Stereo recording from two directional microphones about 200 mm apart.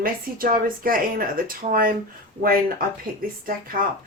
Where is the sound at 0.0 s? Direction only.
45° right (ahead or behind).